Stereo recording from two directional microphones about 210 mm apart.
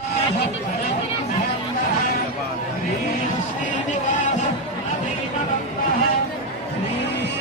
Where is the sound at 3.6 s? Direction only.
35° left (ahead or behind).